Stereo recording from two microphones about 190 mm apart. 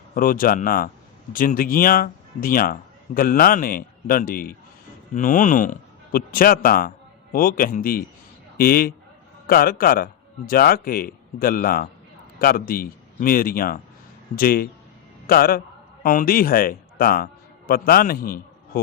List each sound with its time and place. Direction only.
0.1 s a man's voice: 45° left (ahead or behind)